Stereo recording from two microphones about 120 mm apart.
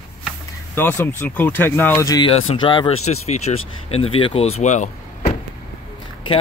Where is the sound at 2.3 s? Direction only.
45° left (ahead or behind).